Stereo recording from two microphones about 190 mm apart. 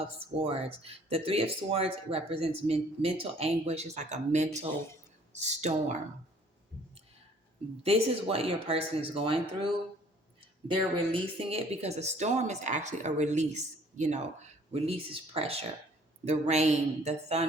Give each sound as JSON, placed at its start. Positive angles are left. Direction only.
{"t": 0.3, "sound": "speech", "side_deg": -30}
{"t": 7.9, "sound": "speech", "side_deg": -30}
{"t": 10.7, "sound": "speech", "side_deg": -30}